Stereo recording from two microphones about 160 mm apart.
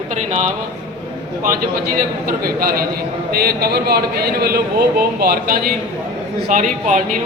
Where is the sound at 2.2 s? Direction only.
65° right (ahead or behind).